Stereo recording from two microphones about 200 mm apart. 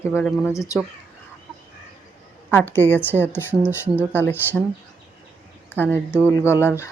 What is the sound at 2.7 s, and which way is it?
Speech, 10° left (ahead or behind).